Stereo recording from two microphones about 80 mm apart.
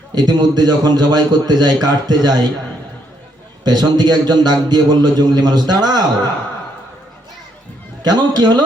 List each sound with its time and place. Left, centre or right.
0.1 s a man's voice: right
3.6 s a man's voice: right
8.0 s a man's voice: right